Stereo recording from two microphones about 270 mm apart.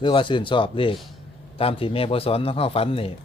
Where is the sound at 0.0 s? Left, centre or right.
Centre.